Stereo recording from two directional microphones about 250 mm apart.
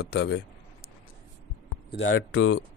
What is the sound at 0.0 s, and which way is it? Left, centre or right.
Speech, left.